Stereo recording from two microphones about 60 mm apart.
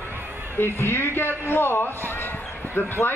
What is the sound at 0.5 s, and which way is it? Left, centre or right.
A man's voice, left.